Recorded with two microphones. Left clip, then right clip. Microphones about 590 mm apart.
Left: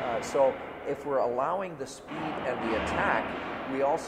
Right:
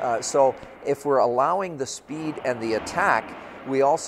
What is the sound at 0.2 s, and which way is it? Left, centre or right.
A man's voice, right.